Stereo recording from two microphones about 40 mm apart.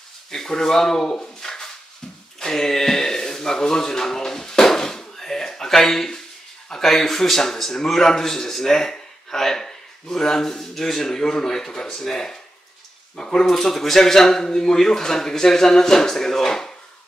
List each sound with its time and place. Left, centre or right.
0.3 s speech: centre
2.4 s a sound: centre
6.7 s a man's voice: centre
13.5 s a man's voice: centre